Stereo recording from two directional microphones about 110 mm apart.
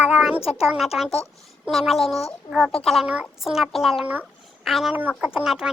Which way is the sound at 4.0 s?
15° right (ahead or behind).